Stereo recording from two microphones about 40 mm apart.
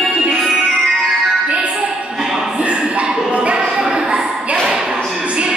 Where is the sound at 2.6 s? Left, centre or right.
Right.